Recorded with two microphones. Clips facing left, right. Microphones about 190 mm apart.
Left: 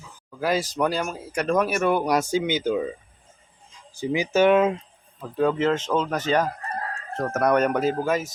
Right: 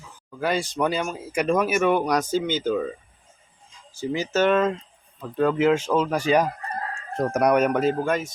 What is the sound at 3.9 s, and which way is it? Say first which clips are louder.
Speech: left 2 dB; 15° left (ahead or behind).